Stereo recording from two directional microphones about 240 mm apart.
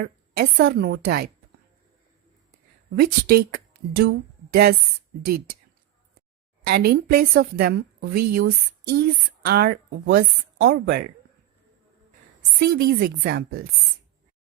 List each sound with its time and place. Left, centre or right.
0.0 s a woman's voice: right
2.9 s a woman's voice: right
6.7 s a woman's voice: right
12.5 s a woman's voice: right